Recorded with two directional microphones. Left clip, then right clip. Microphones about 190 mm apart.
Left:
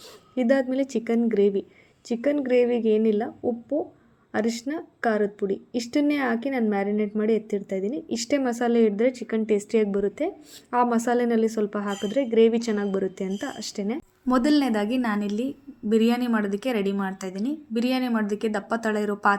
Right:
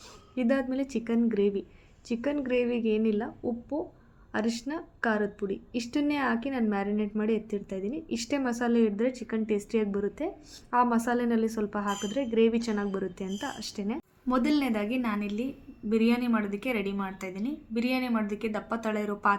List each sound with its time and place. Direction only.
0.3 s a woman's voice: 20° left (ahead or behind)
14.3 s a woman's voice: 35° left (ahead or behind)